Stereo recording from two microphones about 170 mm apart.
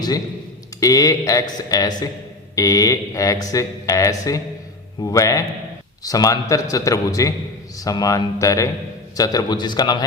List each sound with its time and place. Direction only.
0.8 s speech: 20° left (ahead or behind)